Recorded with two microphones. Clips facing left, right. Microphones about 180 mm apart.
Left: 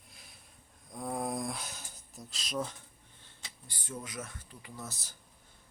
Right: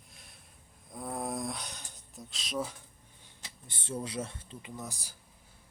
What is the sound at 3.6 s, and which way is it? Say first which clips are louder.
Speech: right 5 dB; 25° right (ahead or behind).